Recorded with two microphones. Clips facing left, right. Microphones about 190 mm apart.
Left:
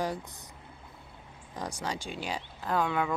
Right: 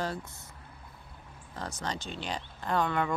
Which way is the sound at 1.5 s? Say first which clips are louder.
Left 1 dB; 10° left (ahead or behind).